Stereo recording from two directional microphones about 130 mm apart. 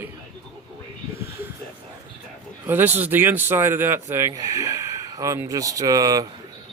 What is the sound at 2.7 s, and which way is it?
Speech, 15° right (ahead or behind).